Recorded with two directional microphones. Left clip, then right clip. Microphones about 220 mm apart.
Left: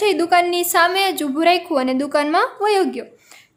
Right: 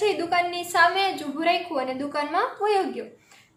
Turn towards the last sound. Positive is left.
turn(degrees=50)  # may be behind; listen again after turning